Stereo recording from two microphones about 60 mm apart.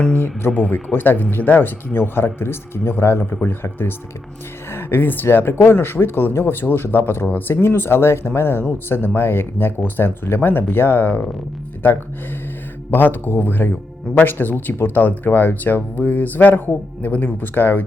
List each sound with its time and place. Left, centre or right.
0.1 s speech: left